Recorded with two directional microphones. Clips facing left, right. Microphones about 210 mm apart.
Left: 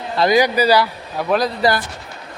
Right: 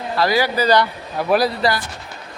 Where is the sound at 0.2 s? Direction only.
20° left (ahead or behind).